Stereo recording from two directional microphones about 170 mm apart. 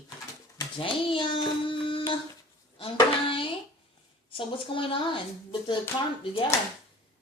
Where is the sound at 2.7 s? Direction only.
30° left (ahead or behind).